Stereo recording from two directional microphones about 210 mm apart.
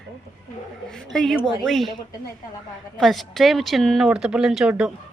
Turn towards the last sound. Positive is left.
turn(degrees=-5)  # may be behind; listen again after turning